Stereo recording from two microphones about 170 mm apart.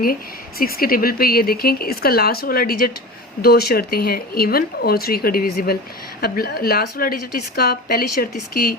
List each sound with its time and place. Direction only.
0.6 s a woman's voice: 60° left (ahead or behind)